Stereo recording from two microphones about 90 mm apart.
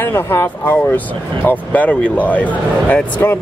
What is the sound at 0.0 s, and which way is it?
Speech, 25° left (ahead or behind).